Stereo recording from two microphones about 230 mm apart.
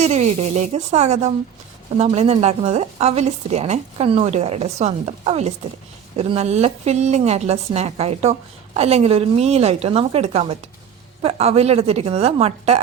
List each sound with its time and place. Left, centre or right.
0.0 s speech: right